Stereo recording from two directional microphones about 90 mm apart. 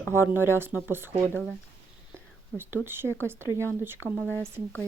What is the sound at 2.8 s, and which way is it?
Speech, 25° right (ahead or behind).